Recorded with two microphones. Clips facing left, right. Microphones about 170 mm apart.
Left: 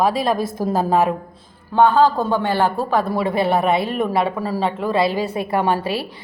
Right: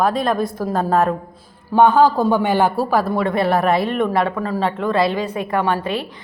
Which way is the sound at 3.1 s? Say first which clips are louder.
Right 1 dB; 5° left (ahead or behind).